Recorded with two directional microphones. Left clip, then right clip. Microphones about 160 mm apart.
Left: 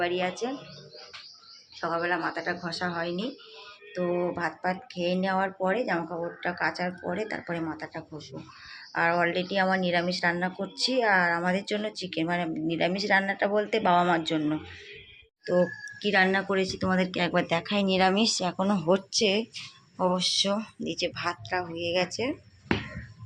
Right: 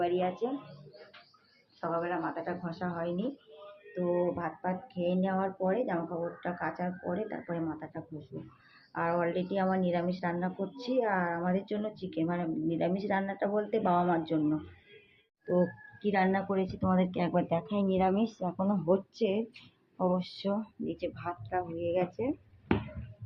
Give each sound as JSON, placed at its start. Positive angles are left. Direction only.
{"t": 0.0, "sound": "speech", "side_deg": 10}
{"t": 1.8, "sound": "speech", "side_deg": 15}
{"t": 4.4, "sound": "speech", "side_deg": 15}
{"t": 8.9, "sound": "speech", "side_deg": 15}
{"t": 16.0, "sound": "speech", "side_deg": 5}